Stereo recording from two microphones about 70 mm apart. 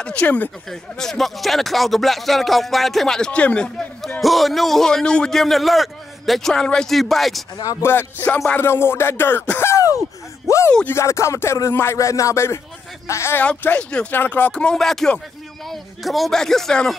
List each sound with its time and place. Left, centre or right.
0.0 s speech: centre
0.7 s a man's voice: centre
4.2 s a man's voice: centre
7.8 s a sound: left
10.9 s music: left
13.0 s speech: left
13.6 s speech: left
14.5 s speech: centre